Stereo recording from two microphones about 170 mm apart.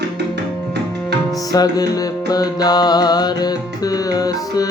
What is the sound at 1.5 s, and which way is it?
Music, 20° left (ahead or behind).